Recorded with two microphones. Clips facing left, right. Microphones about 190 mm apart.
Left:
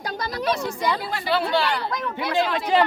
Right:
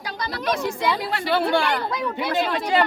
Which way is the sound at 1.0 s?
65° right (ahead or behind).